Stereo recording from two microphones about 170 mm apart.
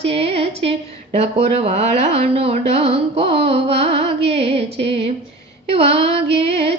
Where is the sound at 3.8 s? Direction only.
40° right (ahead or behind).